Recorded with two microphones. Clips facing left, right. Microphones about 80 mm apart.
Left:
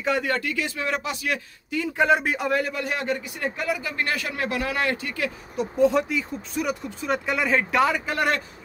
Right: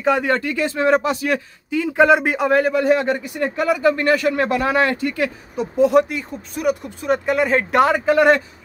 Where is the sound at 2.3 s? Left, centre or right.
Right.